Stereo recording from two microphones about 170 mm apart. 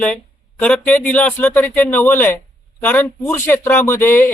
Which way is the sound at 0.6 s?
10° left (ahead or behind).